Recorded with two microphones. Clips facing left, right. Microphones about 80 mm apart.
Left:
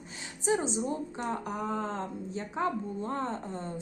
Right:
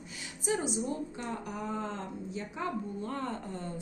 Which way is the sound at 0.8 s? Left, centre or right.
Left.